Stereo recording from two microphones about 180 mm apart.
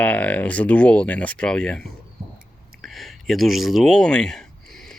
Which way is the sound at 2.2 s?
30° right (ahead or behind).